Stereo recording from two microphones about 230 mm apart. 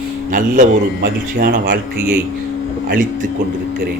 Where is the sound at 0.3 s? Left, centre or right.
Right.